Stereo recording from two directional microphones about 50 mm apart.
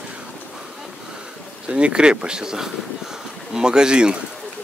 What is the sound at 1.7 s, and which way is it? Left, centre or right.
Speech, centre.